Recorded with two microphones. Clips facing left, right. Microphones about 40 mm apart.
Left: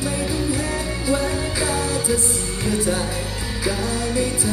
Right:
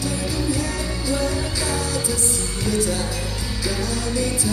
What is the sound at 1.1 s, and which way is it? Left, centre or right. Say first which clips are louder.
Music: left 2 dB; left.